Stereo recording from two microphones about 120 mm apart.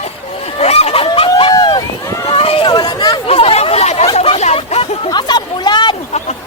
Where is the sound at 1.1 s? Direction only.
50° left (ahead or behind).